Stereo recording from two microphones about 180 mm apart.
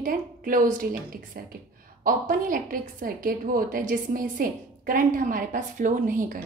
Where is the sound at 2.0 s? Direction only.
50° right (ahead or behind).